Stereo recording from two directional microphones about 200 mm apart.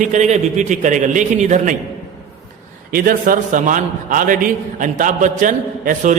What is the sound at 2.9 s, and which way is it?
A man's voice, 45° right (ahead or behind).